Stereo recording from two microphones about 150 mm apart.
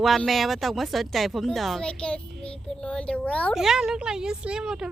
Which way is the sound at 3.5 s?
5° right (ahead or behind).